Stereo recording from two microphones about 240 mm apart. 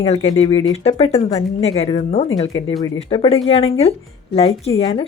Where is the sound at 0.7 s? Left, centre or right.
Left.